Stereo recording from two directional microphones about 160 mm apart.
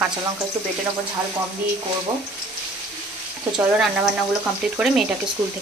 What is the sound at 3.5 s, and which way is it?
Speech, 5° right (ahead or behind).